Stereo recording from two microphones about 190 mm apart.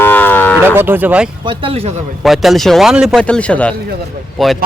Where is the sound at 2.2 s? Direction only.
Centre (ahead or behind).